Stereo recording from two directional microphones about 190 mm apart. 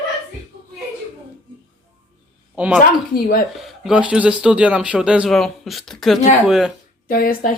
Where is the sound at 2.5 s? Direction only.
5° right (ahead or behind).